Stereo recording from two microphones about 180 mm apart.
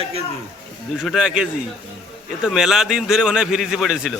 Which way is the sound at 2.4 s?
Centre (ahead or behind).